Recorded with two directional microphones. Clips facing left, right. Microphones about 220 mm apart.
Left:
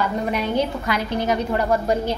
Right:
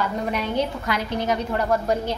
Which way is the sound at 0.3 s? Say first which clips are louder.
Left 2 dB; 5° left (ahead or behind).